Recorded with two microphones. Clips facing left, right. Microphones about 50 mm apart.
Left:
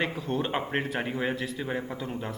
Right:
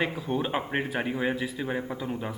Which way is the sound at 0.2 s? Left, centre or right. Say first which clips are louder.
Right 1 dB; centre.